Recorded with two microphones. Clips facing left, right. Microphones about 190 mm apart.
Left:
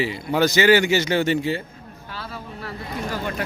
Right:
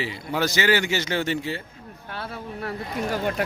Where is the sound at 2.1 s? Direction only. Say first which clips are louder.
Right 2 dB; 55° right (ahead or behind).